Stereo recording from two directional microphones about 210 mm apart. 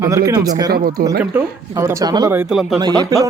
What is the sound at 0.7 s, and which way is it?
Speech, 45° right (ahead or behind).